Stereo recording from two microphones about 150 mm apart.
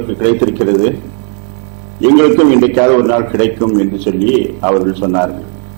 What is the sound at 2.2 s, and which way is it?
A man's voice, 15° right (ahead or behind).